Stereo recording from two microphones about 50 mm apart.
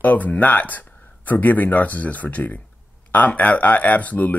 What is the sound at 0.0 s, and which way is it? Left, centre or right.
Speech, left.